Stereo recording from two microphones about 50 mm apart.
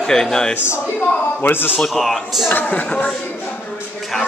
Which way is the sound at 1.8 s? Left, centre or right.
Centre.